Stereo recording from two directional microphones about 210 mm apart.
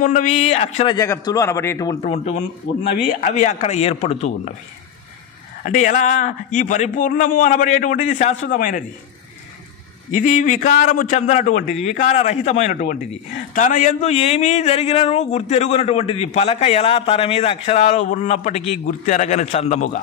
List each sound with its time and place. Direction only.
0.0 s a man's voice: 35° left (ahead or behind)
0.9 s a man's voice: 15° left (ahead or behind)
2.0 s a man's voice: 30° left (ahead or behind)
5.6 s a man's voice: 40° left (ahead or behind)
10.1 s a man's voice: 35° left (ahead or behind)